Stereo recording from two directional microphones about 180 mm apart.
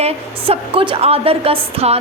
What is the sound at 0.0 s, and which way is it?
A woman's voice, 35° right (ahead or behind).